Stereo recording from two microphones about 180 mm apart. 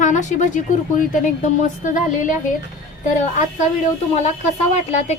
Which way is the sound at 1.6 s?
45° left (ahead or behind).